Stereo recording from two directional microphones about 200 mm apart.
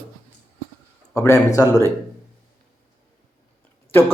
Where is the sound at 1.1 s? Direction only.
15° left (ahead or behind).